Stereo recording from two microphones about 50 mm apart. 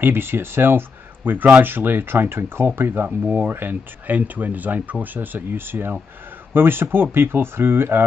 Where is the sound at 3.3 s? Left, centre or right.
Right.